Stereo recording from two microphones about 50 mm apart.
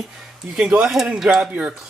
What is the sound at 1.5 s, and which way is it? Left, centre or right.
Speech, right.